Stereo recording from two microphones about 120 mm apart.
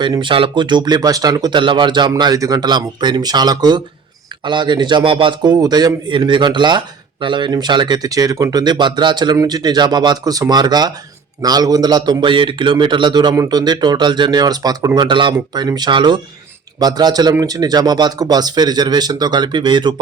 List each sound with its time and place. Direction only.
0.0 s a man's voice: 40° right (ahead or behind)